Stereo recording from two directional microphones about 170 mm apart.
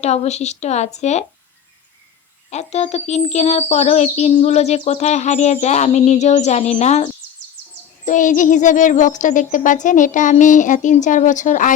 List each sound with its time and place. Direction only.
0.0 s a child's voice: 40° left (ahead or behind)
2.5 s a child's voice: 40° left (ahead or behind)